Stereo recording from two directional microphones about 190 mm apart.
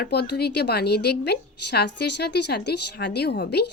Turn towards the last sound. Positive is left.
turn(degrees=60)  # may be behind; listen again after turning